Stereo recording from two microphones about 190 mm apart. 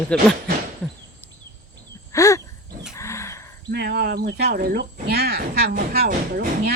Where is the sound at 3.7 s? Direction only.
60° right (ahead or behind).